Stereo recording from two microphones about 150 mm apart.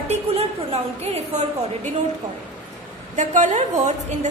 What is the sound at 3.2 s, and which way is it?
A woman's voice, 50° right (ahead or behind).